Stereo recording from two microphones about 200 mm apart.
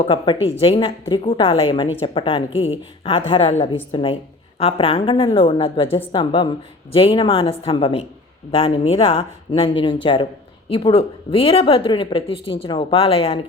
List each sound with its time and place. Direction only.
0.0 s a woman's voice: 25° left (ahead or behind)